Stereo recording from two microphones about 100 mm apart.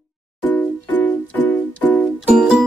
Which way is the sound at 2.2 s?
5° right (ahead or behind).